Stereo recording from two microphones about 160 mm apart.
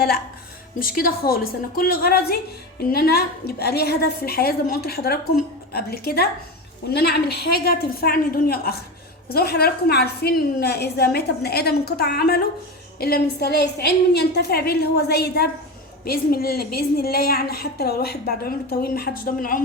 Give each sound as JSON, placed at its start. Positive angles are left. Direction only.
{"t": 0.8, "sound": "a woman's voice", "side_deg": 65}
{"t": 6.9, "sound": "a woman's voice", "side_deg": 90}
{"t": 16.0, "sound": "a woman's voice", "side_deg": 70}